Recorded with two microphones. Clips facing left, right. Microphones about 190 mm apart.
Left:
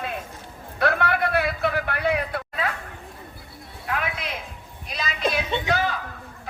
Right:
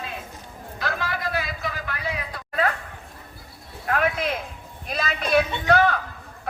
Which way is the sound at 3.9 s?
45° right (ahead or behind).